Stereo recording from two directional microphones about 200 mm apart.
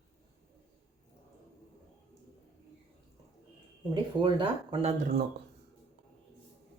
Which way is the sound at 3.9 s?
25° right (ahead or behind).